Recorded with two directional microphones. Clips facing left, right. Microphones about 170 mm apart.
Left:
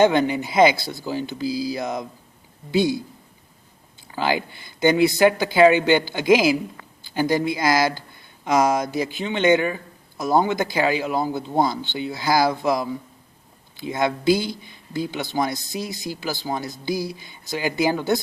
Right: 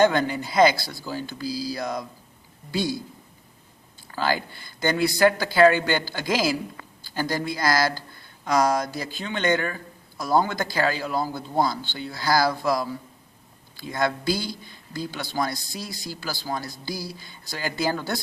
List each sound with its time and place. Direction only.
0.0 s a man's voice: 20° left (ahead or behind)
4.1 s a man's voice: 15° left (ahead or behind)